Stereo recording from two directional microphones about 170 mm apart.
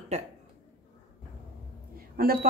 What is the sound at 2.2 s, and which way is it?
Speech, 60° right (ahead or behind).